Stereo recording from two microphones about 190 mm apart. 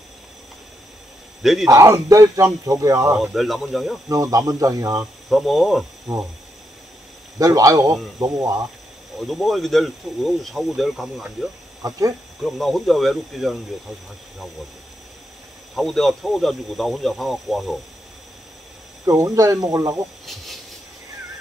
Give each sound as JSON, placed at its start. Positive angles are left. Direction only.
{"t": 1.4, "sound": "speech", "side_deg": 0}
{"t": 1.7, "sound": "speech", "side_deg": -15}
{"t": 3.2, "sound": "speech", "side_deg": 0}
{"t": 4.1, "sound": "speech", "side_deg": -15}
{"t": 5.3, "sound": "speech", "side_deg": 0}
{"t": 7.3, "sound": "speech", "side_deg": -20}
{"t": 9.3, "sound": "speech", "side_deg": 0}
{"t": 12.4, "sound": "speech", "side_deg": 0}
{"t": 15.7, "sound": "speech", "side_deg": 0}
{"t": 19.0, "sound": "speech", "side_deg": -15}